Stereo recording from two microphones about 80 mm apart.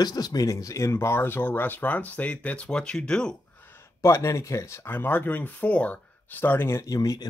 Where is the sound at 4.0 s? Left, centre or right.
Left.